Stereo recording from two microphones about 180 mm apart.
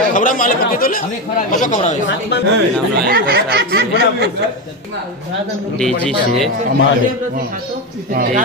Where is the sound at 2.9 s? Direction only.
60° right (ahead or behind).